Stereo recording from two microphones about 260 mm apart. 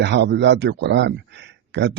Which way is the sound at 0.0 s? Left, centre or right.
Right.